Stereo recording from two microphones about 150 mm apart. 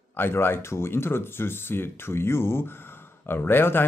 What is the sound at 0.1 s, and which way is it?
Speech, 15° left (ahead or behind).